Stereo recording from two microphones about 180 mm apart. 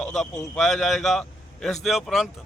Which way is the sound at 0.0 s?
Centre (ahead or behind).